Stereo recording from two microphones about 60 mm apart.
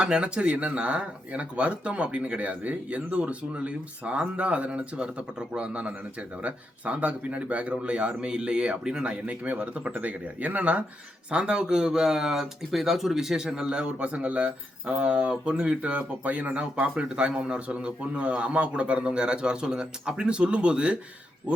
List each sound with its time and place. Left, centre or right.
0.0 s speech: centre